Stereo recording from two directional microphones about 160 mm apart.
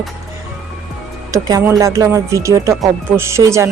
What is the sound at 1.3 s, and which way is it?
Speech, 20° right (ahead or behind).